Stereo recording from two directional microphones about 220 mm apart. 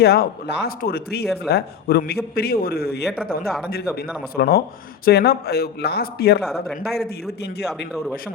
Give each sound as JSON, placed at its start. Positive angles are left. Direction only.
{"t": 0.0, "sound": "a man's voice", "side_deg": 45}
{"t": 3.1, "sound": "speech", "side_deg": 0}
{"t": 4.4, "sound": "a man's voice", "side_deg": 45}
{"t": 6.4, "sound": "speech", "side_deg": 0}